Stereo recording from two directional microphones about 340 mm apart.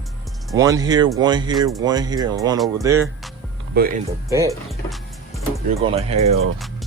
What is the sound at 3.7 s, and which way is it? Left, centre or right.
Speech, right.